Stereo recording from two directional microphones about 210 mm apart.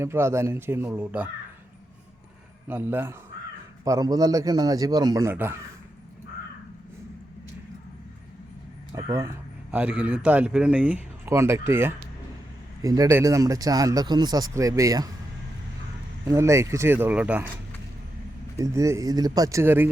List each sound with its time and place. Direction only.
0.0 s speech: 10° right (ahead or behind)
2.6 s speech: 10° right (ahead or behind)
9.0 s speech: 15° right (ahead or behind)
16.2 s speech: 15° right (ahead or behind)
18.6 s speech: 15° right (ahead or behind)